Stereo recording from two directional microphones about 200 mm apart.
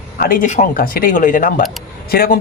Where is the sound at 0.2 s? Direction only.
45° left (ahead or behind).